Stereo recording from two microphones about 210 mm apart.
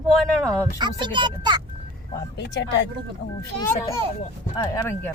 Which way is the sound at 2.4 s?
55° left (ahead or behind).